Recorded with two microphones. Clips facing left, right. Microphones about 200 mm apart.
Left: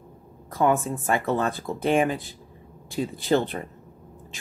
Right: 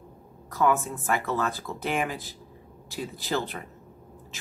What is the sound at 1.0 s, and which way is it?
Speech, 25° left (ahead or behind).